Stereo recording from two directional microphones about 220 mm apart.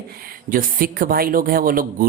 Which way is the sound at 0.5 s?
40° right (ahead or behind).